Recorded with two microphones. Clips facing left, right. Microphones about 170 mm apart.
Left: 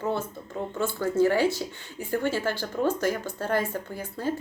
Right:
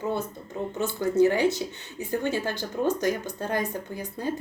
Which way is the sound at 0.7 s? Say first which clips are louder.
Right 1 dB; 20° right (ahead or behind).